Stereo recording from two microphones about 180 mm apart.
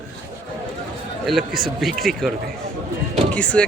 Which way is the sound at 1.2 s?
Centre (ahead or behind).